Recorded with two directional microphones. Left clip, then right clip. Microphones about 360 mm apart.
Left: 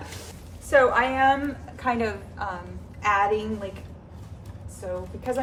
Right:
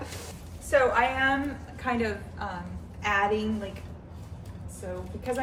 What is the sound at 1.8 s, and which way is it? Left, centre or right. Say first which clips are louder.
Speech: left 3 dB; centre.